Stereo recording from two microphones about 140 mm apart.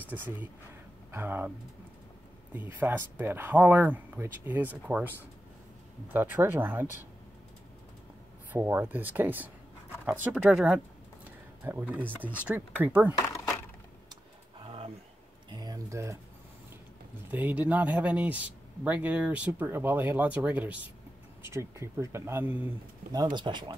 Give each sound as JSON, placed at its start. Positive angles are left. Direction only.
{"t": 0.0, "sound": "a man's voice", "side_deg": -15}
{"t": 2.5, "sound": "a man's voice", "side_deg": -15}
{"t": 6.1, "sound": "a man's voice", "side_deg": -15}
{"t": 8.5, "sound": "a man's voice", "side_deg": -15}
{"t": 14.6, "sound": "a sound", "side_deg": -40}
{"t": 15.5, "sound": "a sound", "side_deg": -30}
{"t": 17.3, "sound": "a man's voice", "side_deg": -10}
{"t": 23.1, "sound": "speech", "side_deg": -30}